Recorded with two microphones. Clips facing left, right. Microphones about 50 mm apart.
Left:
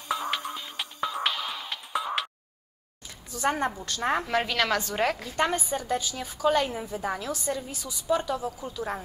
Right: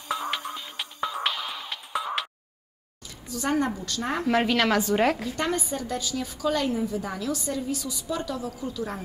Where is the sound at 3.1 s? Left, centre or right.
Left.